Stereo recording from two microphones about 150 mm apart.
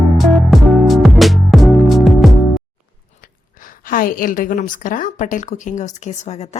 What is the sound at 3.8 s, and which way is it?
A woman's voice, 70° left (ahead or behind).